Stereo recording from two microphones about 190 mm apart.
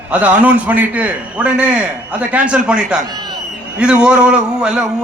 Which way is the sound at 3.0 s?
20° right (ahead or behind).